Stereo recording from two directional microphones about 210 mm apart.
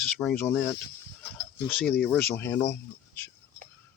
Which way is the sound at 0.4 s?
10° left (ahead or behind).